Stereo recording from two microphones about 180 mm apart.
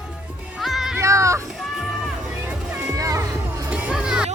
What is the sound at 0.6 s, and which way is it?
Music, centre (ahead or behind).